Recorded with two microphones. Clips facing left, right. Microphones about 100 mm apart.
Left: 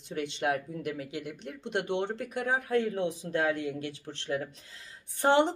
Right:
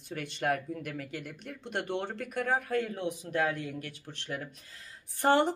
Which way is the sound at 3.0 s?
30° left (ahead or behind).